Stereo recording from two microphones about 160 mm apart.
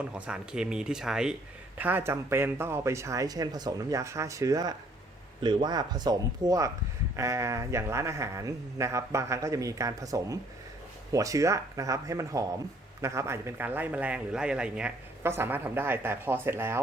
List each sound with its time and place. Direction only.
0.0 s a man's voice: 5° right (ahead or behind)